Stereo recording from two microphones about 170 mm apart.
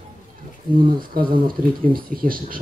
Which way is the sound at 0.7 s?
55° right (ahead or behind).